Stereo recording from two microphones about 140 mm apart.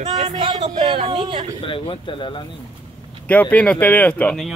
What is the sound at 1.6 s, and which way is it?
Speech, 40° left (ahead or behind).